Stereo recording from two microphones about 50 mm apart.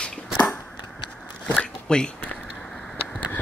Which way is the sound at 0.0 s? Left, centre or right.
Left.